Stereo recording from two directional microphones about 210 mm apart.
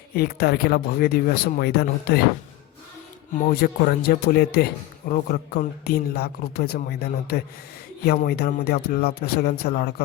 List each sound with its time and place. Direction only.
0.1 s speech: 50° left (ahead or behind)
3.3 s speech: 45° left (ahead or behind)